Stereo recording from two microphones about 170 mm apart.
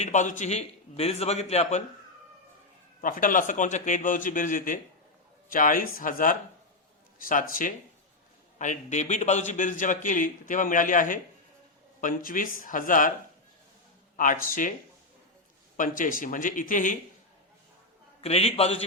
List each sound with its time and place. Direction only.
0.0 s a man's voice: 45° left (ahead or behind)
3.0 s a man's voice: 55° left (ahead or behind)
14.2 s a man's voice: 55° left (ahead or behind)
15.8 s a man's voice: 55° left (ahead or behind)
18.2 s a man's voice: 35° left (ahead or behind)